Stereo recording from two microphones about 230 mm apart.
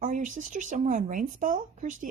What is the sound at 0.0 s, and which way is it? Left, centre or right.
Speech, right.